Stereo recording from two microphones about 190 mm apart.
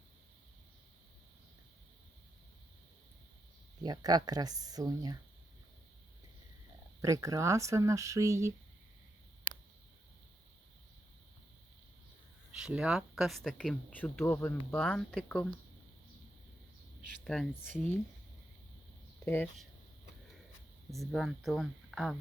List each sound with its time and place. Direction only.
3.8 s speech: 20° right (ahead or behind)
7.0 s speech: 15° right (ahead or behind)
12.5 s speech: 5° right (ahead or behind)
17.2 s speech: 5° left (ahead or behind)
19.2 s speech: 10° left (ahead or behind)
21.1 s speech: centre (ahead or behind)